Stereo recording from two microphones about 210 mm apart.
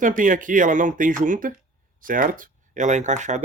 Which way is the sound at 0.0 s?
40° right (ahead or behind).